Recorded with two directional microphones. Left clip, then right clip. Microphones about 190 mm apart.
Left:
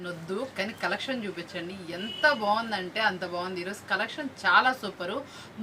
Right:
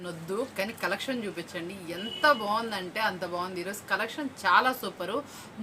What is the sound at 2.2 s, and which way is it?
A woman's voice, 15° right (ahead or behind).